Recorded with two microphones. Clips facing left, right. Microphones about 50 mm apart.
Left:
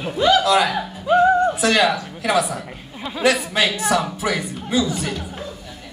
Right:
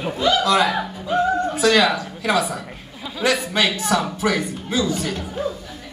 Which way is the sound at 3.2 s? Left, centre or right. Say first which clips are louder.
Left 1 dB; left.